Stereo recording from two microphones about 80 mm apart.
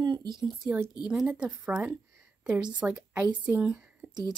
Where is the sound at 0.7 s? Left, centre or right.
Right.